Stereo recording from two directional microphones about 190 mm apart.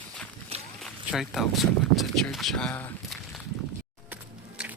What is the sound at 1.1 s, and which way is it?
Speech, centre (ahead or behind).